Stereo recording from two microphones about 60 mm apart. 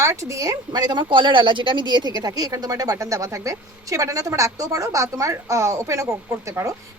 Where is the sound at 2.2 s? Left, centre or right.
Right.